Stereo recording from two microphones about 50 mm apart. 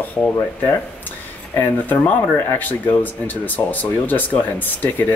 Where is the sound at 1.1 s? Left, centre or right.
Left.